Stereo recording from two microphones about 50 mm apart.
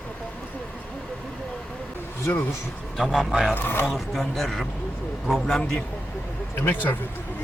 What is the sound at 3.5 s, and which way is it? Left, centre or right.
Speech, left.